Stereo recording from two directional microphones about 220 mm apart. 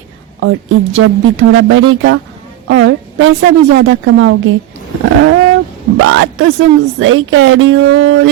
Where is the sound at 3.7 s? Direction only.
55° right (ahead or behind).